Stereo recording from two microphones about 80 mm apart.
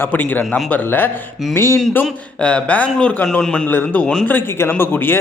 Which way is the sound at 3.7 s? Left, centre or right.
Left.